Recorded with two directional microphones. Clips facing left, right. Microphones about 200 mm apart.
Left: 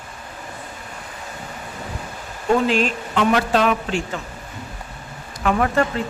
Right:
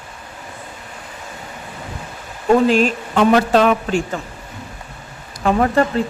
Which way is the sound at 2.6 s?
40° right (ahead or behind).